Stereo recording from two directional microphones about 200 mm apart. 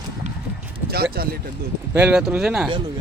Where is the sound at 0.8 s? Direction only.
50° right (ahead or behind).